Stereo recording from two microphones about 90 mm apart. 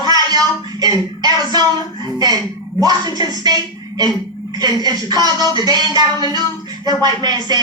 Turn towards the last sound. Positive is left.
turn(degrees=-50)  # may be behind; listen again after turning